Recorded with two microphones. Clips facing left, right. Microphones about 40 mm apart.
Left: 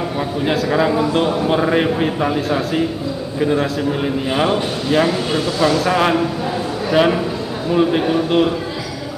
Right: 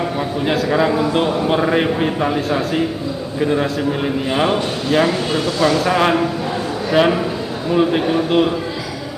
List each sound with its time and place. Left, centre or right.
0.5 s a man's voice: centre